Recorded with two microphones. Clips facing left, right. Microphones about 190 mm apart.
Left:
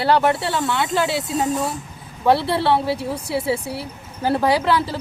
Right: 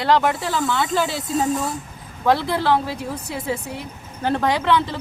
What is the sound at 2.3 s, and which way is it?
Speech, 30° left (ahead or behind).